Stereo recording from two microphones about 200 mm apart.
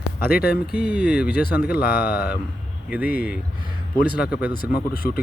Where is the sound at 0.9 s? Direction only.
5° right (ahead or behind).